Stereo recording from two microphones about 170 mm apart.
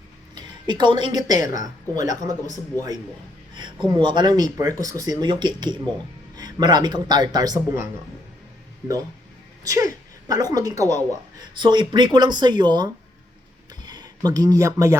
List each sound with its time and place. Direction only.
0.3 s a woman's voice: 25° right (ahead or behind)
9.6 s a woman's voice: 20° right (ahead or behind)